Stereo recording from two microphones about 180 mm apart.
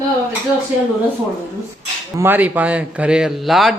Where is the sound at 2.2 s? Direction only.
10° right (ahead or behind).